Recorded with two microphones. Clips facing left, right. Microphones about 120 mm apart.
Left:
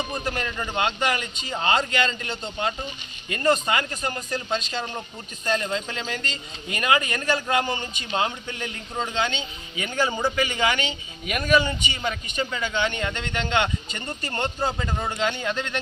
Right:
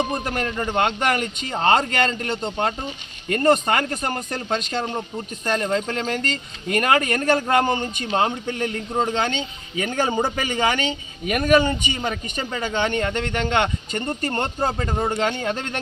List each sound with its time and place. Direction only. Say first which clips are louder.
0.0 s speech: right 5 dB; 55° right (ahead or behind)